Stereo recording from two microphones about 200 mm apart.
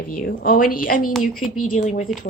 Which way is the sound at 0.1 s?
45° left (ahead or behind).